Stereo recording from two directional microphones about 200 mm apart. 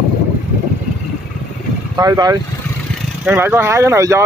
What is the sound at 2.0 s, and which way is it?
Speech, 20° right (ahead or behind).